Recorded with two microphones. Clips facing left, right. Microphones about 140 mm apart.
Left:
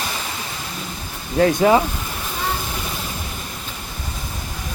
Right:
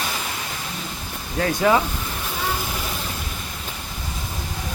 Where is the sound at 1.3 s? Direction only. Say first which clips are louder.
Left 4 dB; 30° left (ahead or behind).